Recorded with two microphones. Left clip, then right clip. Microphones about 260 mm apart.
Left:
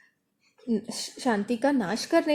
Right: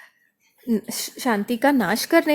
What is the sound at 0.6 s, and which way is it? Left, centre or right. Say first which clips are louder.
Speech: right 5 dB; right.